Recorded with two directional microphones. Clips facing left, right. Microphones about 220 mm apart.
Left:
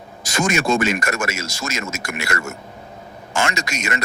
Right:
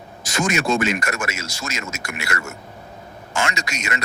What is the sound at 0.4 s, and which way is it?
Speech, 45° left (ahead or behind).